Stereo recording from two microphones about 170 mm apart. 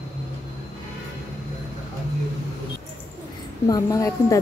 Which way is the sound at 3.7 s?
20° left (ahead or behind).